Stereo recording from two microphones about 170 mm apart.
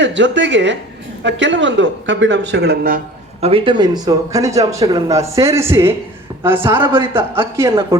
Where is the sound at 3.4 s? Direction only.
35° right (ahead or behind).